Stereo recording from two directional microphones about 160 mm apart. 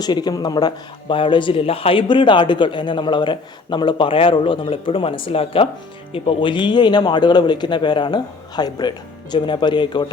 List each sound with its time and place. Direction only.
0.0 s a man's voice: 25° left (ahead or behind)